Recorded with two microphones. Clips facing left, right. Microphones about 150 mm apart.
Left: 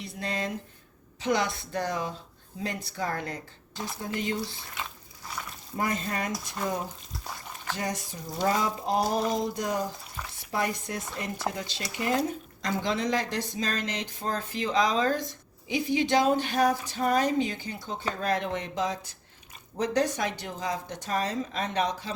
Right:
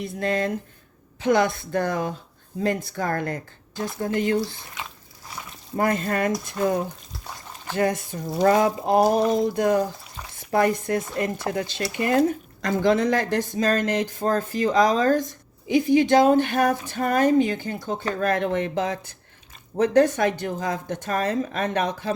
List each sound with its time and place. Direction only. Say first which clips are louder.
0.0 s speech: right 8 dB; 55° right (ahead or behind)
5.7 s speech: right 7 dB; 55° right (ahead or behind)
7.8 s speech: right 12 dB; 55° right (ahead or behind)
12.6 s speech: right 8 dB; 50° right (ahead or behind)